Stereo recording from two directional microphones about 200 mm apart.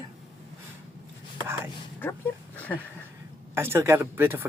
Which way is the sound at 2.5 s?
10° left (ahead or behind).